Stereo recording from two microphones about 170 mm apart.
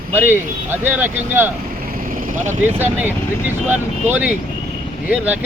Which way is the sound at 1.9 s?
55° right (ahead or behind).